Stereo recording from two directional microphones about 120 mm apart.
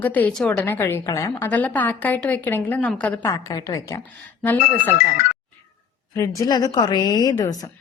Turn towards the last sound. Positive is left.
turn(degrees=30)  # may be behind; listen again after turning